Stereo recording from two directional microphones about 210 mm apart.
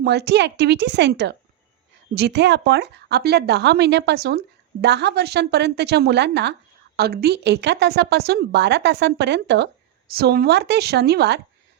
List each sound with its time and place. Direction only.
0.0 s a woman's voice: 50° right (ahead or behind)